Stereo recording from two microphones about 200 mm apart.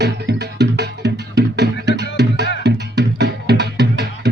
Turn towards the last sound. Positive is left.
turn(degrees=-60)  # may be behind; listen again after turning